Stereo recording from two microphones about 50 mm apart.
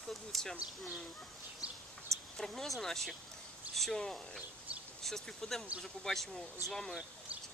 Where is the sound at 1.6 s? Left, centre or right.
Right.